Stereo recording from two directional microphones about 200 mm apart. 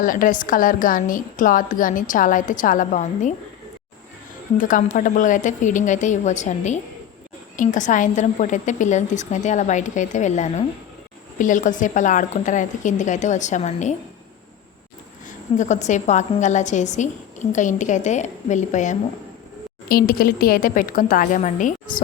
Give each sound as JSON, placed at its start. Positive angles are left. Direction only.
{"t": 0.0, "sound": "a woman's voice", "side_deg": 45}
{"t": 4.5, "sound": "a woman's voice", "side_deg": 40}
{"t": 15.5, "sound": "a woman's voice", "side_deg": 35}